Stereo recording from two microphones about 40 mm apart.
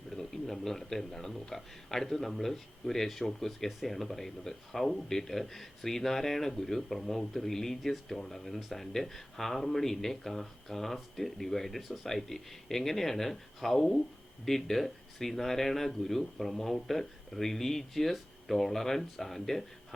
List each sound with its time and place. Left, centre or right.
0.1 s speech: centre